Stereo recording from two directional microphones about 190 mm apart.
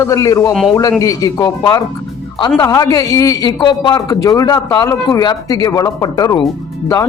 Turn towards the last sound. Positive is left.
turn(degrees=20)  # may be behind; listen again after turning